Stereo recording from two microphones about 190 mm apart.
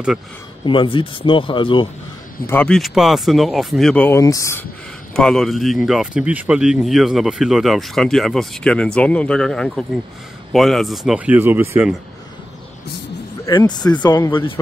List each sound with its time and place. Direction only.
0.7 s speech: 25° left (ahead or behind)
2.4 s speech: 5° left (ahead or behind)
5.1 s speech: centre (ahead or behind)
13.5 s speech: 25° left (ahead or behind)